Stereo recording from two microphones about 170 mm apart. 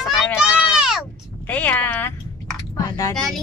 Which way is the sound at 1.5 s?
10° left (ahead or behind).